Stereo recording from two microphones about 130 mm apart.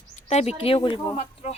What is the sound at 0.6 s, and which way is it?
Speech, 45° left (ahead or behind).